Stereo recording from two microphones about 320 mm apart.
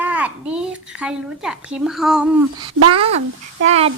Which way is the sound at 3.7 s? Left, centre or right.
Centre.